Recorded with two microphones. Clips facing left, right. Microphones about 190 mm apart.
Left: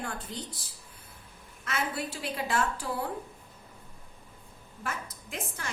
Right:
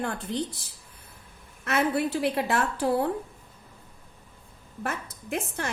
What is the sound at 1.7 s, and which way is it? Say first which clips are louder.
A woman's voice: right 8 dB; 65° right (ahead or behind).